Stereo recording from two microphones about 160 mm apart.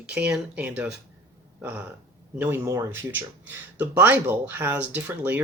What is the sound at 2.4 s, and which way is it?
Speech, 15° right (ahead or behind).